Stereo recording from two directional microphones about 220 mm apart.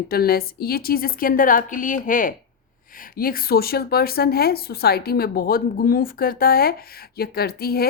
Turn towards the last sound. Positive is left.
turn(degrees=45)  # may be behind; listen again after turning